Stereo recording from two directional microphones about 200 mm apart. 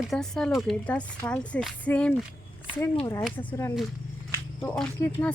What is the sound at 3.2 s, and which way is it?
Speech, 5° left (ahead or behind).